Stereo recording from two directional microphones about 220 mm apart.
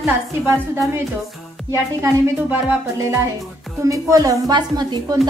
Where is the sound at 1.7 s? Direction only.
10° right (ahead or behind).